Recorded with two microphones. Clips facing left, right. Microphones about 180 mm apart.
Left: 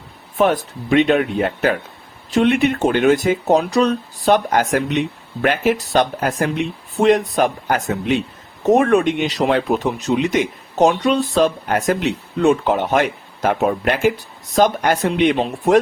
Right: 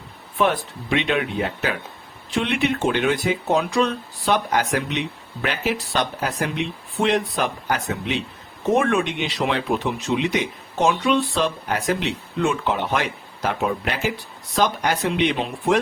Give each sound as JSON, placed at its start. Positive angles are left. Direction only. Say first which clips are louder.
{"t": 0.3, "sound": "speech", "louder": "left 4 dB", "side_deg": 45}